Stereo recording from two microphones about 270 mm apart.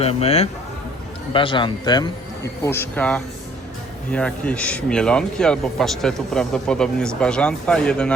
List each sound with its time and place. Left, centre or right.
0.0 s a man's voice: left; by 8.1 s centre